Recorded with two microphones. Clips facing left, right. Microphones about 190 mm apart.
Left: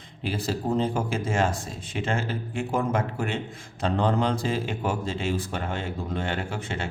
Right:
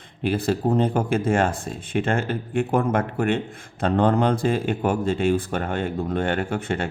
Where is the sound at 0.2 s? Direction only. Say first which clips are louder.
Right 6 dB; 55° right (ahead or behind).